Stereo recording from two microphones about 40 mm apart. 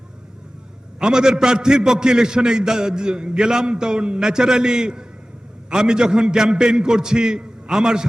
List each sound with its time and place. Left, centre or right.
0.9 s a man's voice: centre